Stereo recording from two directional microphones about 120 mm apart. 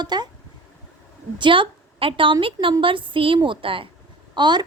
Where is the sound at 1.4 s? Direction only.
45° right (ahead or behind).